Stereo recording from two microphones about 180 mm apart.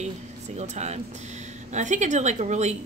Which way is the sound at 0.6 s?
40° right (ahead or behind).